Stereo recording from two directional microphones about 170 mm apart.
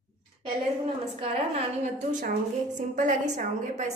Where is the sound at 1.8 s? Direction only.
50° right (ahead or behind).